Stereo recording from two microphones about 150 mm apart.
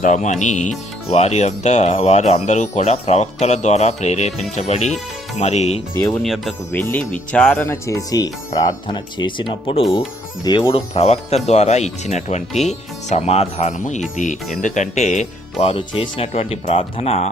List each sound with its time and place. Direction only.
0.0 s speech: 55° left (ahead or behind)
6.1 s speech: centre (ahead or behind)
6.7 s speech: 15° left (ahead or behind)
7.6 s speech: 20° left (ahead or behind)
10.9 s speech: 45° left (ahead or behind)